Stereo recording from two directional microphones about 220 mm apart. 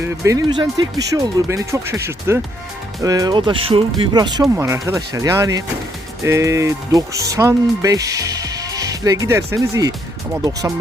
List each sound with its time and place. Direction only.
0.0 s speech: 15° right (ahead or behind)